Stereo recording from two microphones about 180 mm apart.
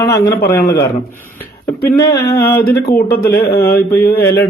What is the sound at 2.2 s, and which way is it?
Speech, 60° left (ahead or behind).